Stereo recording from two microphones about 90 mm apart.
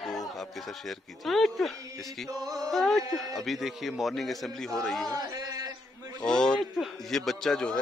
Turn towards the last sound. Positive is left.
turn(degrees=5)  # may be behind; listen again after turning